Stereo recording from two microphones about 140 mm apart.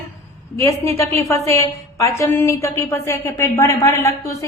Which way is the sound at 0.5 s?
20° left (ahead or behind).